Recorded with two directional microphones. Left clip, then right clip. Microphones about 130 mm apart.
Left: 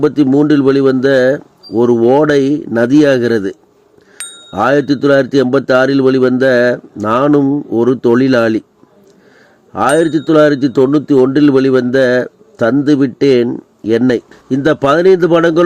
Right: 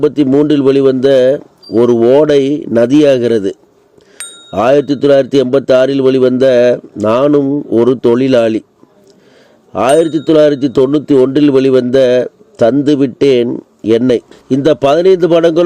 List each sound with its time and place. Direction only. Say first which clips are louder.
0.0 s speech: right 1 dB; 15° right (ahead or behind)
4.2 s bicycle bell: even; centre (ahead or behind)
4.5 s speech: right 2 dB; 15° right (ahead or behind)
9.7 s speech: right 2 dB; 20° right (ahead or behind)